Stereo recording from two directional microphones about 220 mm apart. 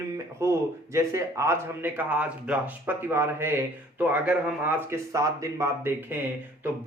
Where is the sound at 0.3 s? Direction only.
10° right (ahead or behind).